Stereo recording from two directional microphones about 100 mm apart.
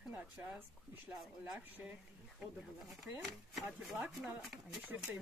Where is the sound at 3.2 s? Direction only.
Centre (ahead or behind).